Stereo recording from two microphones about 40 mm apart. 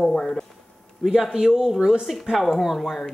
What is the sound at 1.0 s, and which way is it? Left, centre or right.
Speech, centre.